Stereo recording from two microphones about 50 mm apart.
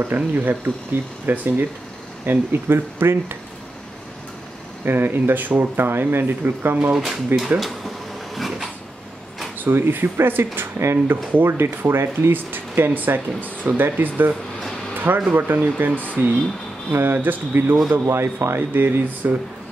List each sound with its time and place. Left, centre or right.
0.0 s speech: right
4.8 s speech: right
7.3 s speech: centre
8.4 s a sound: centre
9.7 s speech: right
10.8 s speech: right
15.9 s speech: left
16.9 s speech: right
18.0 s speech: right